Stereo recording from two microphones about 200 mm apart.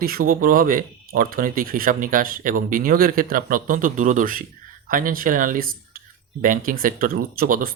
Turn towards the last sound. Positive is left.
turn(degrees=-45)  # may be behind; listen again after turning